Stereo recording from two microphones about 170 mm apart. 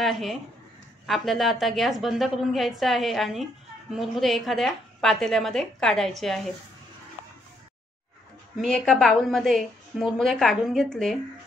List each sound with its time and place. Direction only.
0.0 s a woman's voice: centre (ahead or behind)
8.5 s a woman's voice: centre (ahead or behind)